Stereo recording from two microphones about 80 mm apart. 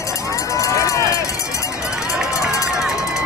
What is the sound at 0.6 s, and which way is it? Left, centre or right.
Run, left.